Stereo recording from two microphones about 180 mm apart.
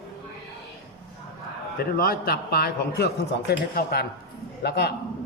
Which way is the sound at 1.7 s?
55° left (ahead or behind).